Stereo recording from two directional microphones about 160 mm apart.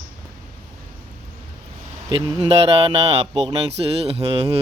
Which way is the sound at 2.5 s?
40° right (ahead or behind).